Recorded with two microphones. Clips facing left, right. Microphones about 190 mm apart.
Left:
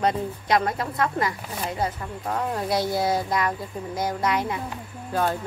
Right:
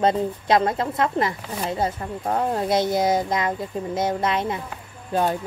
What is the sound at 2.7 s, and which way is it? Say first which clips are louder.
Speech: right 3 dB; 20° right (ahead or behind).